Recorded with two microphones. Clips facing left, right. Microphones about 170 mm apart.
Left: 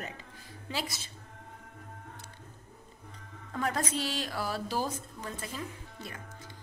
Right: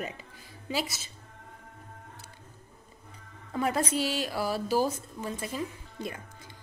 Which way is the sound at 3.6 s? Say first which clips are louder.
Right 4 dB; 10° right (ahead or behind).